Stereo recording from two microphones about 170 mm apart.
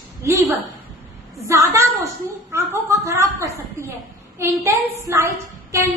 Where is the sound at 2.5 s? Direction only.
15° right (ahead or behind).